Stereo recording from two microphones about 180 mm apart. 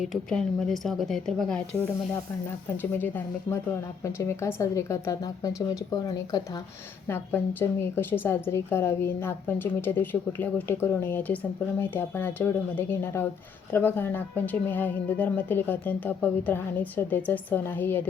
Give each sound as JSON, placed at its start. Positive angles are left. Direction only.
{"t": 0.0, "sound": "a woman's voice", "side_deg": 0}